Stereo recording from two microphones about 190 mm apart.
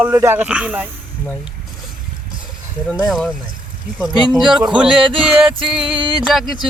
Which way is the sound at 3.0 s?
Centre (ahead or behind).